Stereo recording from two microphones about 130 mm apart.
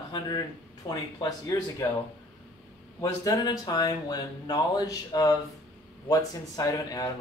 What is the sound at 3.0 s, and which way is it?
A man's voice, 30° left (ahead or behind).